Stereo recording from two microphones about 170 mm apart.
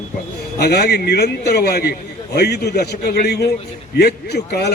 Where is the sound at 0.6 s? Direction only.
70° left (ahead or behind).